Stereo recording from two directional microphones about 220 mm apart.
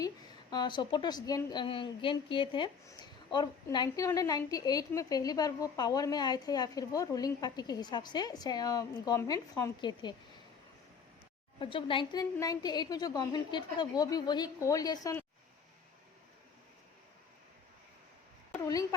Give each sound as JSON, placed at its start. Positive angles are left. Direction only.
{"t": 0.5, "sound": "a woman's voice", "side_deg": 20}
{"t": 11.6, "sound": "a woman's voice", "side_deg": 25}
{"t": 18.7, "sound": "a woman's voice", "side_deg": 15}